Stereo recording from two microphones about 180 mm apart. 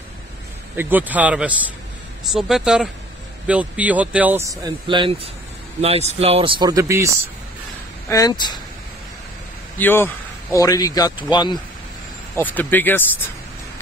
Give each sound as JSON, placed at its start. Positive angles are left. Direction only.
{"t": 0.7, "sound": "speech", "side_deg": -10}
{"t": 4.5, "sound": "speech", "side_deg": -25}
{"t": 8.1, "sound": "speech", "side_deg": 20}
{"t": 9.8, "sound": "speech", "side_deg": 10}
{"t": 12.4, "sound": "speech", "side_deg": 10}